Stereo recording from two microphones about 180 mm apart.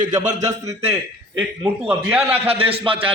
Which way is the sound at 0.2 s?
40° right (ahead or behind).